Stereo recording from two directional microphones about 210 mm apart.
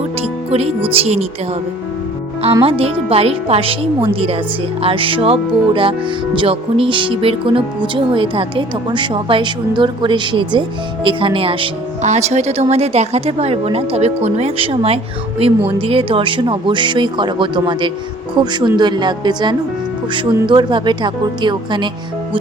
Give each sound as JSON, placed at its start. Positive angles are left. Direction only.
{"t": 0.2, "sound": "speech", "side_deg": -30}
{"t": 2.6, "sound": "a woman's voice", "side_deg": -25}